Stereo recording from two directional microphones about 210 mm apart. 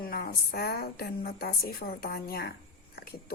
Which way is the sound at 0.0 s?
45° left (ahead or behind).